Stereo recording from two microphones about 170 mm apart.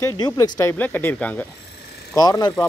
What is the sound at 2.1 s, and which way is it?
Speech, 20° left (ahead or behind).